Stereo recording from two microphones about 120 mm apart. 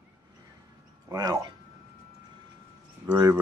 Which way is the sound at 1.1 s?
30° right (ahead or behind).